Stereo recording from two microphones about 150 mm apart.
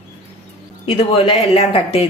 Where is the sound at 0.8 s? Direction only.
40° left (ahead or behind).